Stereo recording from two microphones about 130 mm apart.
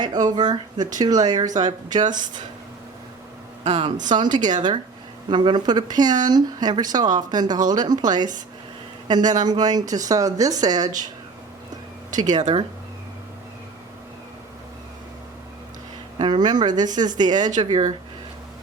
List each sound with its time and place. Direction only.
0.0 s speech: 30° right (ahead or behind)
3.6 s speech: 60° right (ahead or behind)
4.1 s speech: 35° right (ahead or behind)
12.1 s speech: 30° right (ahead or behind)
12.4 s speech: 60° right (ahead or behind)
16.1 s speech: 35° right (ahead or behind)